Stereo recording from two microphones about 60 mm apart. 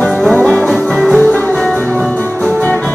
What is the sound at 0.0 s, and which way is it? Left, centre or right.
Music, centre.